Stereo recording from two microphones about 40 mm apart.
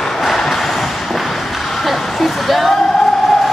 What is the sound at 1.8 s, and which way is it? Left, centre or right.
Speech, centre.